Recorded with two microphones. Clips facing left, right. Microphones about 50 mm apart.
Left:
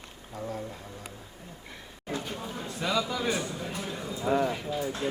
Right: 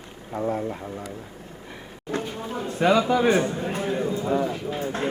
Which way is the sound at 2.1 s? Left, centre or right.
Right.